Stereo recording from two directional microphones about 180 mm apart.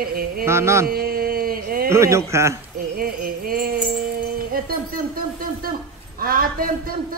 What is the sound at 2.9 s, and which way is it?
Music, 55° right (ahead or behind).